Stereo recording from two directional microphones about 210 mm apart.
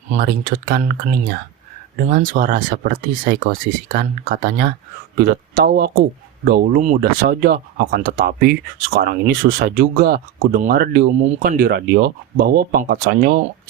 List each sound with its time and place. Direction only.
0.1 s speech: 45° right (ahead or behind)